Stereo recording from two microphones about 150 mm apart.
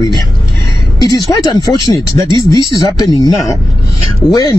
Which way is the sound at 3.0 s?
25° left (ahead or behind).